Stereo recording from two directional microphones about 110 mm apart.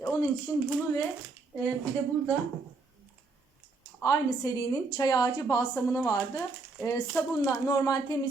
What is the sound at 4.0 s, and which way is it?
Speech, 30° left (ahead or behind).